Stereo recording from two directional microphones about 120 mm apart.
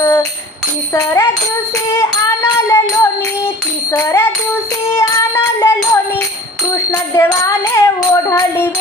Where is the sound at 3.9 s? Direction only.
30° left (ahead or behind).